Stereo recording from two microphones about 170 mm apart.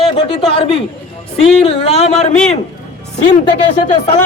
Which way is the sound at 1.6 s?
40° left (ahead or behind).